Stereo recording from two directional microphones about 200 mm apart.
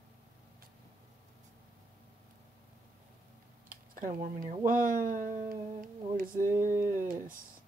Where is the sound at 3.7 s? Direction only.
45° right (ahead or behind).